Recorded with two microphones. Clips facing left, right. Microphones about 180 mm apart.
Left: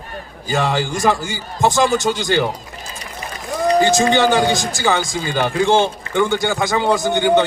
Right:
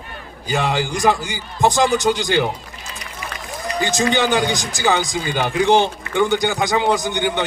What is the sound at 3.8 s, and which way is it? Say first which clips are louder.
Speech: left 4 dB; 20° left (ahead or behind).